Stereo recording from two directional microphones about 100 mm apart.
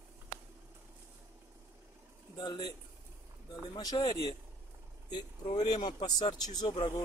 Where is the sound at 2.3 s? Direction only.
45° left (ahead or behind).